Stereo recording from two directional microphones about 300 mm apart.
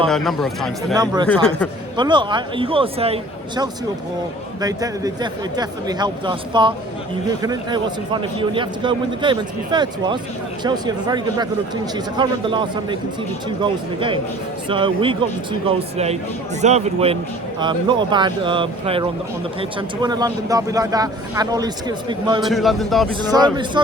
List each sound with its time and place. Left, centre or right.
0.1 s speech: centre
0.9 s a man's voice: centre
1.3 s speech: centre
2.0 s a man's voice: centre
22.4 s speech: centre
23.3 s a man's voice: centre